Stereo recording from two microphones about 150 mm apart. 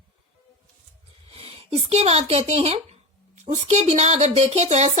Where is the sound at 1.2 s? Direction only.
40° right (ahead or behind).